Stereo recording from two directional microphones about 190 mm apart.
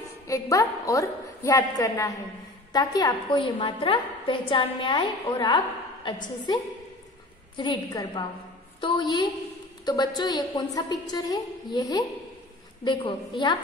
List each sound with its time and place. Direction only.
0.3 s a woman's voice: 15° left (ahead or behind)
7.5 s a woman's voice: 25° left (ahead or behind)